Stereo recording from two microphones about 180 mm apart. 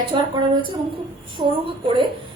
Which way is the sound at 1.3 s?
25° right (ahead or behind).